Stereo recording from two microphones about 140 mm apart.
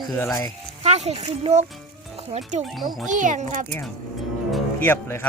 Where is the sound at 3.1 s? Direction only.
65° right (ahead or behind).